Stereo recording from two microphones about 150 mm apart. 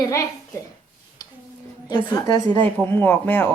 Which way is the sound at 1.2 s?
25° left (ahead or behind).